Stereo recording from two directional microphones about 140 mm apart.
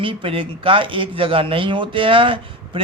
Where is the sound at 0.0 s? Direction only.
40° right (ahead or behind).